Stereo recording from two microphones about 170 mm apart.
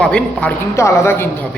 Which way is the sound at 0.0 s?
5° left (ahead or behind).